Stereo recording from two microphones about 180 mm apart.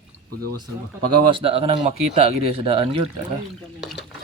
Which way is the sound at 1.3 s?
30° right (ahead or behind).